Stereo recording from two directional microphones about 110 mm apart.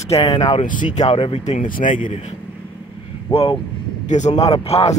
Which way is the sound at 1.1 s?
55° left (ahead or behind).